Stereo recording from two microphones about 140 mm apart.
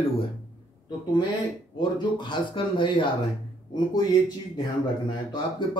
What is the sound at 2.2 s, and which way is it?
Speech, 35° left (ahead or behind).